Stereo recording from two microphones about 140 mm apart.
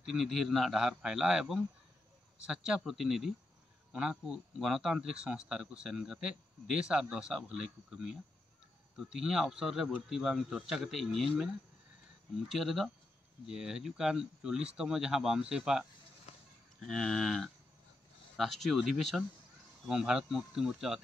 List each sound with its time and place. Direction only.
0.0 s speech: 5° right (ahead or behind)
16.3 s basketball bounce: 55° left (ahead or behind)
16.8 s speech: 5° left (ahead or behind)